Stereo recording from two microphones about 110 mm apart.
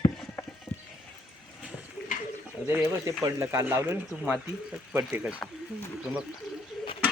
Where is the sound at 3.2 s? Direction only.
25° right (ahead or behind).